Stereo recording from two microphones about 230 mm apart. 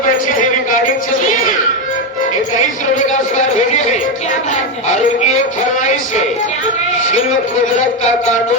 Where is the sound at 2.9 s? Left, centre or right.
Left.